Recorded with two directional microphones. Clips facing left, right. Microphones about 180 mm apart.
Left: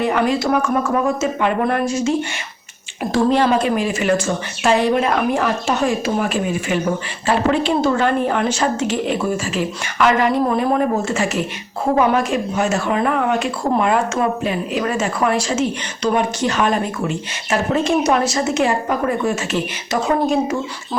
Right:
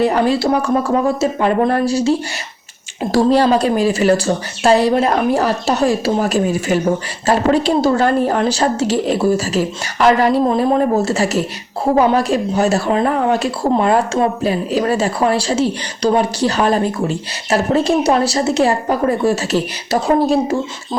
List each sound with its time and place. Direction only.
0.0 s speech: 35° right (ahead or behind)